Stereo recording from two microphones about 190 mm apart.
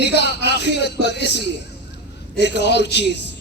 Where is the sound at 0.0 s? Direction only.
60° left (ahead or behind).